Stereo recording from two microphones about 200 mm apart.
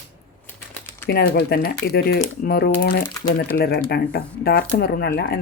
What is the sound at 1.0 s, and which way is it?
A woman's voice, 55° left (ahead or behind).